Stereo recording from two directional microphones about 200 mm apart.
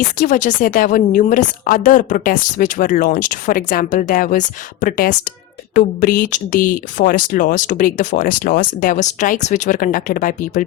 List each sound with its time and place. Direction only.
0.2 s a woman's voice: 40° left (ahead or behind)